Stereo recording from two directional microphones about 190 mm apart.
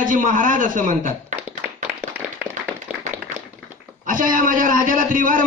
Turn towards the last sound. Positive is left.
turn(degrees=-45)  # may be behind; listen again after turning